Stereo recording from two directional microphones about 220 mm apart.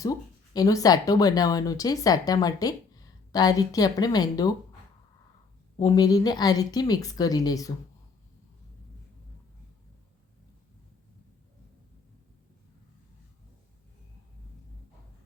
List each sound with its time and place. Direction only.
0.0 s speech: 15° left (ahead or behind)
5.8 s speech: 15° left (ahead or behind)